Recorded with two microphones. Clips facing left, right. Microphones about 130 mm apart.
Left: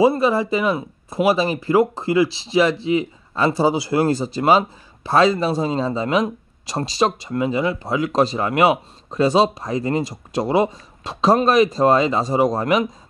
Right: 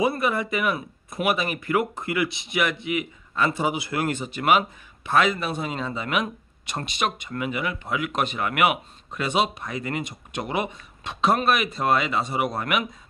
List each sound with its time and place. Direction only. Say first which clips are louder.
0.0 s speech: left 7 dB; 30° left (ahead or behind)